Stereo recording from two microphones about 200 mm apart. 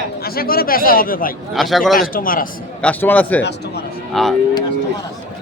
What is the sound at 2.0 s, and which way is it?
Speech, 45° left (ahead or behind).